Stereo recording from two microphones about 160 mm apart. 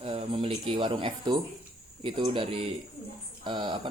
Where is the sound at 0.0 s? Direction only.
35° right (ahead or behind).